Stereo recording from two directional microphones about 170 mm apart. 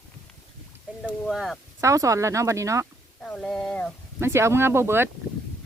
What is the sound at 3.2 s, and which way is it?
Speech, 5° left (ahead or behind).